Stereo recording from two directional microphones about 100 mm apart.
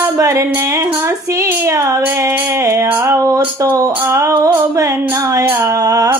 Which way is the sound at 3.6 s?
30° right (ahead or behind).